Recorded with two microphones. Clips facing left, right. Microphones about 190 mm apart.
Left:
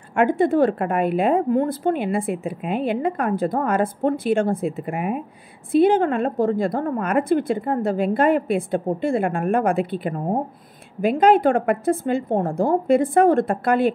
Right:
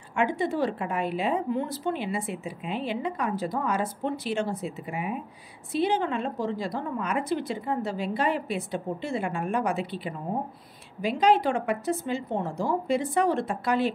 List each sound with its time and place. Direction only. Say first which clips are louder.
0.1 s a woman's voice: left 8 dB; 55° left (ahead or behind)